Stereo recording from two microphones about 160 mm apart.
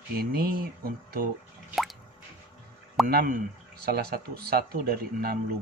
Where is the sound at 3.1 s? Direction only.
60° right (ahead or behind).